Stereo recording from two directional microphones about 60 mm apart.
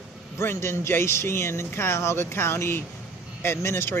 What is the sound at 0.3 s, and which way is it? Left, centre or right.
Speech, left.